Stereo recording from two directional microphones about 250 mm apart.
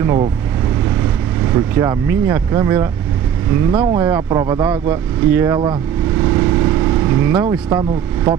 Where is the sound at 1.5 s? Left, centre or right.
Centre.